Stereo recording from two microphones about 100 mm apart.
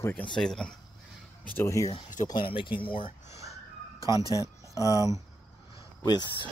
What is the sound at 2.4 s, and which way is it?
Speech, 60° left (ahead or behind).